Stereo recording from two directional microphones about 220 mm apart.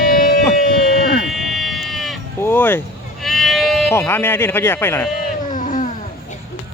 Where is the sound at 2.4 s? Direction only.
10° left (ahead or behind).